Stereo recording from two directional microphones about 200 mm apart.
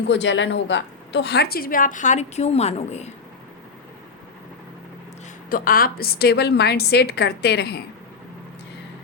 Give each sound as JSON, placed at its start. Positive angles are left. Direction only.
{"t": 0.1, "sound": "a woman's voice", "side_deg": 65}
{"t": 5.5, "sound": "a woman's voice", "side_deg": 45}